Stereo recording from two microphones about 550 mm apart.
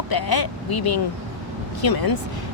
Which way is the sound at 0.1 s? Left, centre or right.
Left.